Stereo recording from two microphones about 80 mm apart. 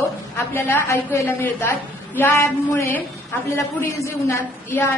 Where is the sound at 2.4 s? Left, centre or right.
Left.